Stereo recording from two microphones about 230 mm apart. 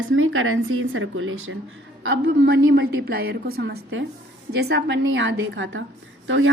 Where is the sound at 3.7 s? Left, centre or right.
Right.